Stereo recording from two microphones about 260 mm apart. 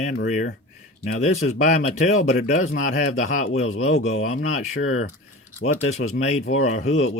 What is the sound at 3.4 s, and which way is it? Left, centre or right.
Speech, left.